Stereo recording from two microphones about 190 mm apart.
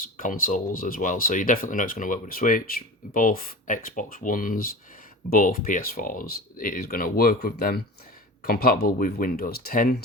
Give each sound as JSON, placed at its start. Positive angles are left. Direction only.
{"t": 0.2, "sound": "speech", "side_deg": 45}